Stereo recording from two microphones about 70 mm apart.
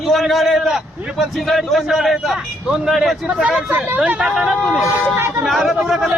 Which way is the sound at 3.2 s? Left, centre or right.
Centre.